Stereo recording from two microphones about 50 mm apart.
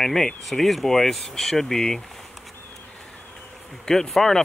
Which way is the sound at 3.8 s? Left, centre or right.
Centre.